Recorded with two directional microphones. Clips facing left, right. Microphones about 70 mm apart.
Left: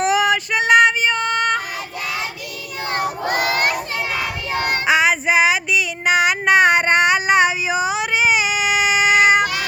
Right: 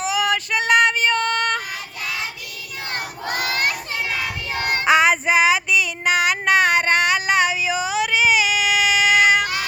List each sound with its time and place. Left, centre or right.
0.2 s female singing: centre
3.2 s a sound: centre
4.6 s female singing: centre; by 9.4 s left